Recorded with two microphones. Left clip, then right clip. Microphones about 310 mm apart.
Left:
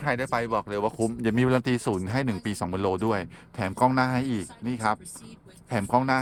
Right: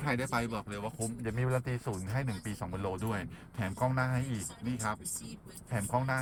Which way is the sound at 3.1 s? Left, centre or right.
Centre.